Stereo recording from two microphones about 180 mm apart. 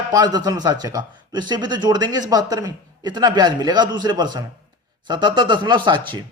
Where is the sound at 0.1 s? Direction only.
20° right (ahead or behind).